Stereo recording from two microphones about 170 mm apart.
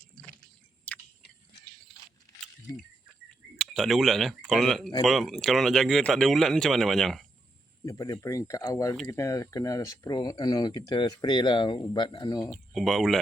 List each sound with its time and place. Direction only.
0.9 s chewing: 10° left (ahead or behind)
1.9 s keys jangling: centre (ahead or behind)
3.6 s speech: centre (ahead or behind)
7.9 s speech: 20° left (ahead or behind)
12.5 s speech: centre (ahead or behind)